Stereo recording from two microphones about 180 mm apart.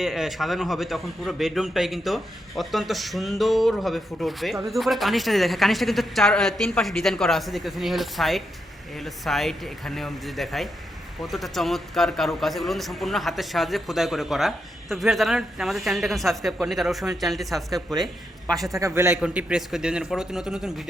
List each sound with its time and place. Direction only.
0.0 s a man's voice: centre (ahead or behind)
18.8 s a man's voice: 15° right (ahead or behind)